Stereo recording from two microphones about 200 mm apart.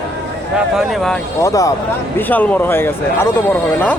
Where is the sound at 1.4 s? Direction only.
15° left (ahead or behind).